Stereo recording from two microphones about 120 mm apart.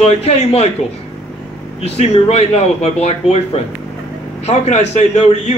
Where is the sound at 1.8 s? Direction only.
60° left (ahead or behind).